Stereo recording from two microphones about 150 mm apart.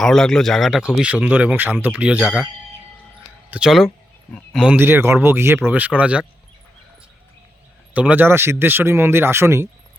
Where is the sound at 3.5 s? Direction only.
5° right (ahead or behind).